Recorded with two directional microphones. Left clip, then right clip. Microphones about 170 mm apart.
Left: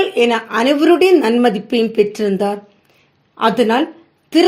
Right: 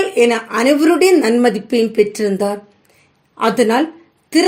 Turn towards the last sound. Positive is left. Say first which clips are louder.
# left 1 dB
turn(degrees=25)  # may be behind; listen again after turning